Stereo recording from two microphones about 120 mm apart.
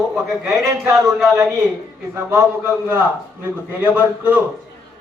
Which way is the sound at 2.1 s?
20° right (ahead or behind).